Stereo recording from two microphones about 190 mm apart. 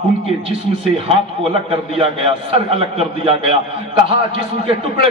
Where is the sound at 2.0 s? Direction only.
30° right (ahead or behind).